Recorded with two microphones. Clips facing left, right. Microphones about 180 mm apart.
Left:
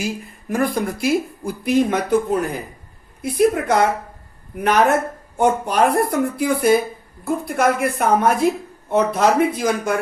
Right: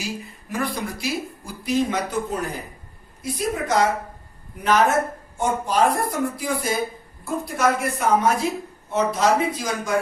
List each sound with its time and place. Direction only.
0.0 s speech: 50° left (ahead or behind)
3.2 s speech: 55° left (ahead or behind)